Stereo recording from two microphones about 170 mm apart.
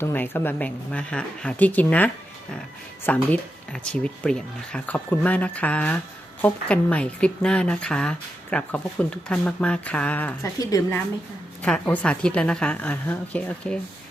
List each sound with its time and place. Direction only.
0.0 s speech: 10° left (ahead or behind)
3.1 s speech: 10° left (ahead or behind)
10.6 s a woman's voice: 20° left (ahead or behind)
11.6 s speech: 5° left (ahead or behind)